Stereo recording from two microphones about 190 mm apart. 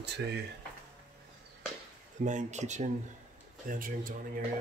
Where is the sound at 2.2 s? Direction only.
40° right (ahead or behind).